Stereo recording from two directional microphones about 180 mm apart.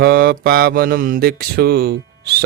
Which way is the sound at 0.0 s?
55° right (ahead or behind).